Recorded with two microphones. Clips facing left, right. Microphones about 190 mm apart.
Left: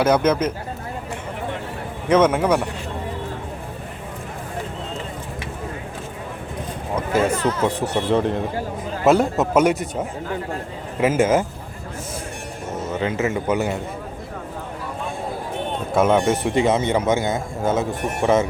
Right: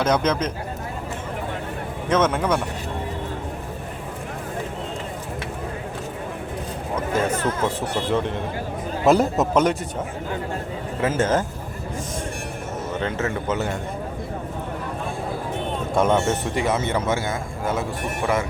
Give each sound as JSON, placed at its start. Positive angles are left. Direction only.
{"t": 0.0, "sound": "a man's voice", "side_deg": 10}
{"t": 2.0, "sound": "a man's voice", "side_deg": 10}
{"t": 7.1, "sound": "a man's voice", "side_deg": 10}
{"t": 9.0, "sound": "a man's voice", "side_deg": 0}
{"t": 11.0, "sound": "a man's voice", "side_deg": 10}
{"t": 13.0, "sound": "a man's voice", "side_deg": 10}
{"t": 16.0, "sound": "a man's voice", "side_deg": 10}